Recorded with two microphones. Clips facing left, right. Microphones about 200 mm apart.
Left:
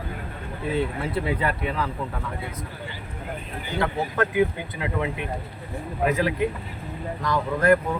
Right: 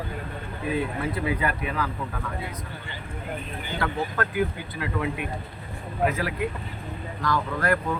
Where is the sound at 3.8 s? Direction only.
20° left (ahead or behind).